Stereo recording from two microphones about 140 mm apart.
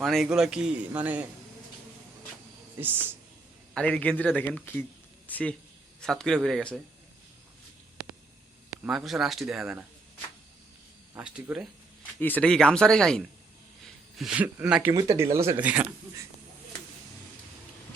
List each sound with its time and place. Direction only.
0.0 s a man's voice: centre (ahead or behind)
3.8 s a man's voice: 10° left (ahead or behind)
8.8 s speech: 5° right (ahead or behind)
11.2 s a man's voice: 5° right (ahead or behind)
12.2 s speech: 10° left (ahead or behind); by 15.9 s 10° right (ahead or behind)